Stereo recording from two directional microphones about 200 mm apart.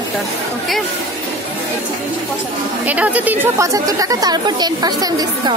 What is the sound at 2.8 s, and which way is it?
Speech, 5° right (ahead or behind).